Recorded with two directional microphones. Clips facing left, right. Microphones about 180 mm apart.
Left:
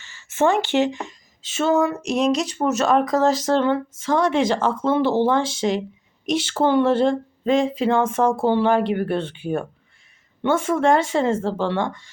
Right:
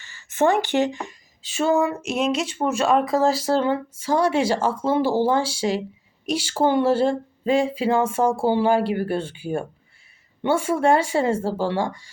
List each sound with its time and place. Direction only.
0.5 s speech: 15° right (ahead or behind)